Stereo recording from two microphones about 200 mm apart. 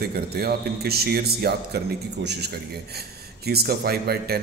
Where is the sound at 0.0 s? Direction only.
50° right (ahead or behind).